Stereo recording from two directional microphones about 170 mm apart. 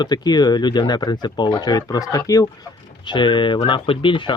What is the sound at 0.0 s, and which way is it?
Speech, 25° left (ahead or behind).